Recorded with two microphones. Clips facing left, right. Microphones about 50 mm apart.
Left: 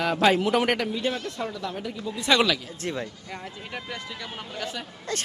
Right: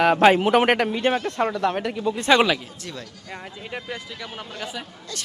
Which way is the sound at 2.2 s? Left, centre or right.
Right.